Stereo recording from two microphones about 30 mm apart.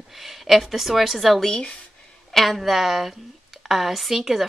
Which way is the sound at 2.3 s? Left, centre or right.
Centre.